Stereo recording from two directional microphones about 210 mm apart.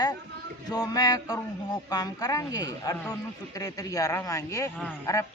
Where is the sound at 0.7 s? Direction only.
15° left (ahead or behind).